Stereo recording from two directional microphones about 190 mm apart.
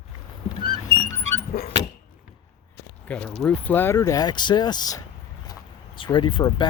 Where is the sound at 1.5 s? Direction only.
50° left (ahead or behind).